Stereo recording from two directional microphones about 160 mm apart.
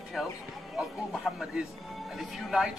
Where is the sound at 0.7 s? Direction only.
5° right (ahead or behind).